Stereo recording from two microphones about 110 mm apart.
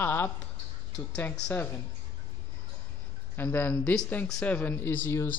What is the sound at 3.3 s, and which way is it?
Speech, 20° left (ahead or behind).